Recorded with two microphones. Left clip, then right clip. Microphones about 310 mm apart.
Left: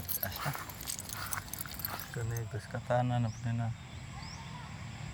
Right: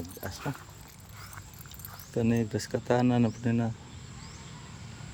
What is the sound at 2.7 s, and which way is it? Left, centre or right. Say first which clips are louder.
Speech: right 5 dB; right.